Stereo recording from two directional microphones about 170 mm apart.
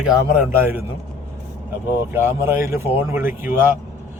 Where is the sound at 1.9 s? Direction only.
15° right (ahead or behind).